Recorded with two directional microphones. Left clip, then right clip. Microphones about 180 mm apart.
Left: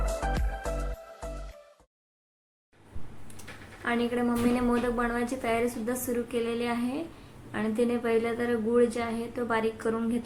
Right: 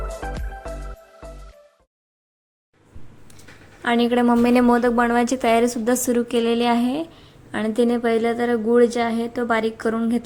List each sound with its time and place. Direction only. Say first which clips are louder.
3.8 s a woman's voice: right 10 dB; 45° right (ahead or behind)